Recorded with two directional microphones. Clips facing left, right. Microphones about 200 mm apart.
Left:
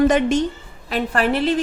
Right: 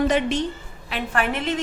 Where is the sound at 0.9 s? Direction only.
35° left (ahead or behind).